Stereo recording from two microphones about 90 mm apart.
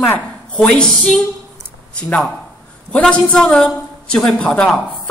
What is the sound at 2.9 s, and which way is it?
A woman's voice, 10° left (ahead or behind).